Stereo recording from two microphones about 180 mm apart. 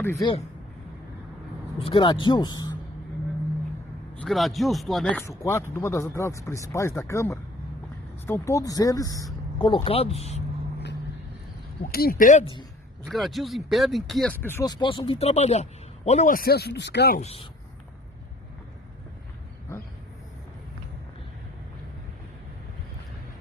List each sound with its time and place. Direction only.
0.0 s speech: 15° left (ahead or behind)
1.8 s speech: 30° left (ahead or behind)
4.2 s speech: centre (ahead or behind)
5.4 s speech: 15° left (ahead or behind); by 10.4 s 35° left (ahead or behind)
11.9 s speech: 55° left (ahead or behind)
13.1 s speech: centre (ahead or behind)
14.4 s speech: 15° left (ahead or behind); by 17.2 s 65° left (ahead or behind)
17.2 s speech: 35° left (ahead or behind)